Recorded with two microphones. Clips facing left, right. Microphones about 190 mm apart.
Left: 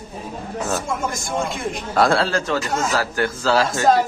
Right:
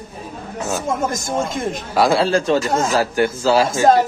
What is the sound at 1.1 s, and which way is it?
Speech, 40° right (ahead or behind).